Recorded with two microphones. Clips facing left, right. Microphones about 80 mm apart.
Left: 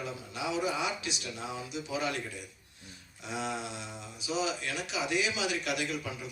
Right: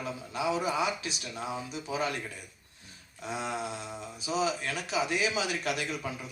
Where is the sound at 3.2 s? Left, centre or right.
Right.